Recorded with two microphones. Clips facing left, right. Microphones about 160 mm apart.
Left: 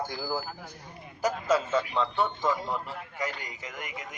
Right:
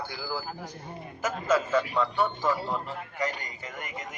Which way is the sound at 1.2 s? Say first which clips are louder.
Even; 30° left (ahead or behind).